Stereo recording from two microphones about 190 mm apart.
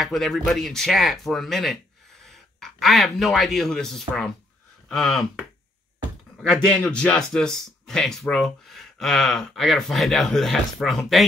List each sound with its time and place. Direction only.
0.0 s speech: centre (ahead or behind)